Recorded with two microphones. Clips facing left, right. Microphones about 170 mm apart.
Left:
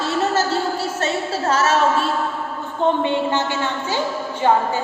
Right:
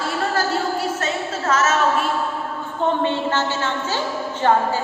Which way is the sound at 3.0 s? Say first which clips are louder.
Left 1 dB; 15° left (ahead or behind).